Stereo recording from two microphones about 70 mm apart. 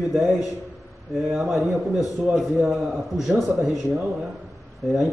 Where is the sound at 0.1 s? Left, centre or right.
Centre.